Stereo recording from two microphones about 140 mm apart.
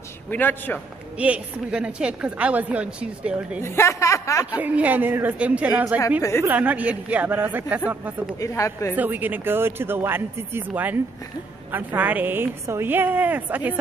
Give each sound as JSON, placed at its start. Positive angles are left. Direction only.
{"t": 0.3, "sound": "a man's voice", "side_deg": 15}
{"t": 1.1, "sound": "a woman's voice", "side_deg": -10}
{"t": 3.6, "sound": "speech", "side_deg": 20}
{"t": 4.5, "sound": "a woman's voice", "side_deg": -10}
{"t": 8.4, "sound": "speech", "side_deg": 20}
{"t": 8.9, "sound": "a woman's voice", "side_deg": -15}